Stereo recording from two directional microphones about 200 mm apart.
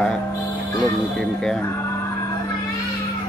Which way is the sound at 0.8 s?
Centre (ahead or behind).